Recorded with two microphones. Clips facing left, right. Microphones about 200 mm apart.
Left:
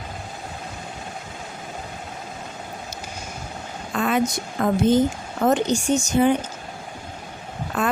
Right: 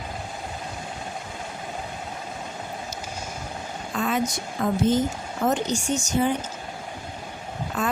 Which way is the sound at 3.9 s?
65° left (ahead or behind).